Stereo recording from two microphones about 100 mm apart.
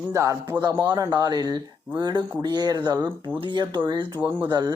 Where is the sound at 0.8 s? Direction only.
40° right (ahead or behind).